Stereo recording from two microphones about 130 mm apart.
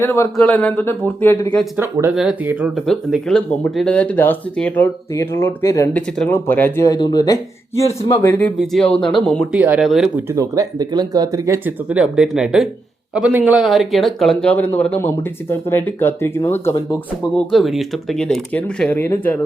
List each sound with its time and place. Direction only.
0.0 s speech: 20° left (ahead or behind)
0.3 s speech: 10° left (ahead or behind)
1.7 s speech: 20° right (ahead or behind)
2.7 s speech: centre (ahead or behind); by 5.9 s 25° left (ahead or behind)
5.9 s speech: 10° left (ahead or behind)
6.8 s speech: 30° left (ahead or behind)
8.0 s speech: 20° left (ahead or behind)
8.5 s speech: centre (ahead or behind)
9.0 s speech: 40° left (ahead or behind)
9.5 s speech: 10° right (ahead or behind)
10.2 s speech: 20° right (ahead or behind)
11.9 s speech: 5° right (ahead or behind); by 16.7 s 20° left (ahead or behind)
17.3 s speech: centre (ahead or behind)
18.5 s speech: 10° left (ahead or behind)